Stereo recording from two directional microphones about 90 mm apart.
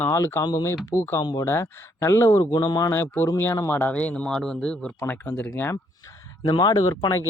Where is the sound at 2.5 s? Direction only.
45° left (ahead or behind).